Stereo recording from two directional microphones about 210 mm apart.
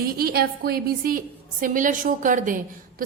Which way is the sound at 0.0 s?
45° right (ahead or behind).